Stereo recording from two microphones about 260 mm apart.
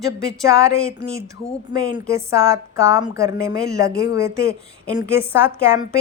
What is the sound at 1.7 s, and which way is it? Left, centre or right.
A woman's voice, centre.